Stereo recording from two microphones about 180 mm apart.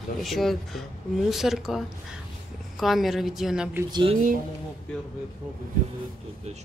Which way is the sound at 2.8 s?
Centre (ahead or behind).